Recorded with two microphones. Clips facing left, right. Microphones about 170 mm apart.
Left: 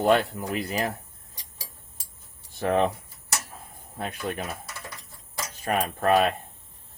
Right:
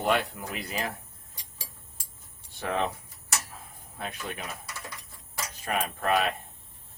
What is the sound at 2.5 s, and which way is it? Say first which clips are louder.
Speech: left 6 dB; 45° left (ahead or behind).